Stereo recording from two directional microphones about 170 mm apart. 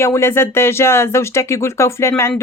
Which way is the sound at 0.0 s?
15° left (ahead or behind).